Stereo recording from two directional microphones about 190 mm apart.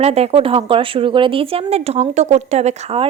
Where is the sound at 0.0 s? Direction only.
35° right (ahead or behind).